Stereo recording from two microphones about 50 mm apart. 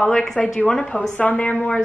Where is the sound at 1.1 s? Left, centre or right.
Left.